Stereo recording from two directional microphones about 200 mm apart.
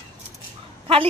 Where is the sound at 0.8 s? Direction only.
25° right (ahead or behind).